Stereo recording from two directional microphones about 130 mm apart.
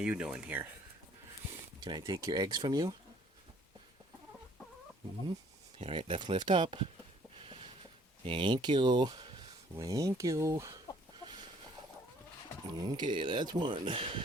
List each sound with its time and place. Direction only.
0.0 s speech: 10° right (ahead or behind)
1.8 s speech: 30° right (ahead or behind)
5.8 s speech: 40° right (ahead or behind)
8.2 s speech: 40° right (ahead or behind)
12.7 s speech: 30° right (ahead or behind)